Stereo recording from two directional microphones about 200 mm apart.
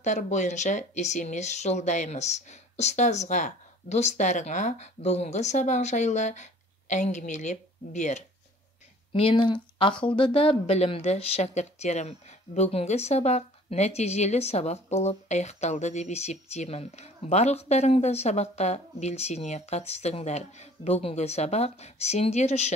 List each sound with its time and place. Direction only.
0.0 s speech: 35° left (ahead or behind)